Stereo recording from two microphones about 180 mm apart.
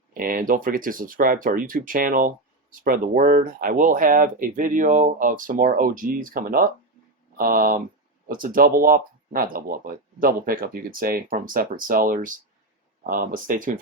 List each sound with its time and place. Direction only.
0.1 s speech: 50° right (ahead or behind)